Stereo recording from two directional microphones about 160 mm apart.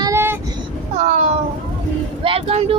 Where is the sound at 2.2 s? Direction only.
35° right (ahead or behind).